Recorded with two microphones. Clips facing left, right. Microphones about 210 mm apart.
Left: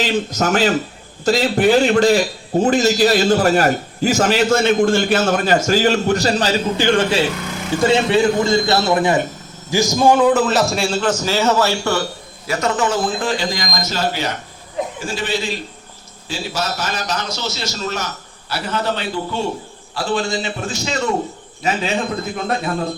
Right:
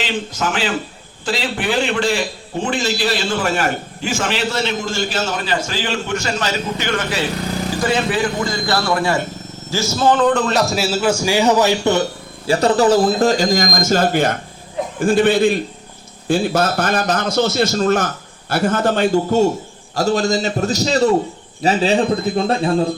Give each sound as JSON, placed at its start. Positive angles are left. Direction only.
{"t": 0.0, "sound": "a man's voice", "side_deg": 40}
{"t": 12.5, "sound": "a man's voice", "side_deg": -35}